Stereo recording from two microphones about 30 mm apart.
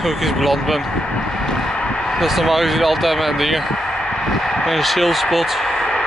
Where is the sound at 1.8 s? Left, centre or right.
Left.